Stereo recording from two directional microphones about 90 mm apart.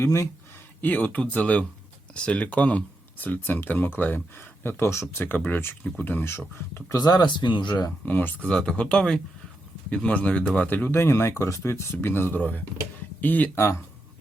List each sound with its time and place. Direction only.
0.0 s speech: 35° left (ahead or behind)
0.8 s speech: 20° left (ahead or behind)
6.9 s speech: 45° left (ahead or behind)
8.0 s speech: 20° left (ahead or behind)